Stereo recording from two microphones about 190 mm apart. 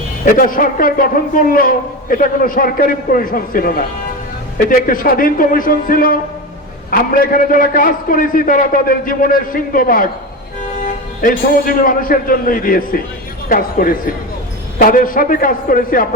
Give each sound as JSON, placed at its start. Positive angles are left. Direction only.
{"t": 0.3, "sound": "a man's voice", "side_deg": 45}
{"t": 11.2, "sound": "a man's voice", "side_deg": 50}